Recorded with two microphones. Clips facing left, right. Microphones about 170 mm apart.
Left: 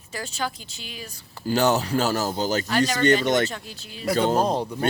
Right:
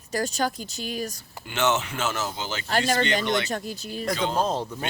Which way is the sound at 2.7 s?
45° right (ahead or behind).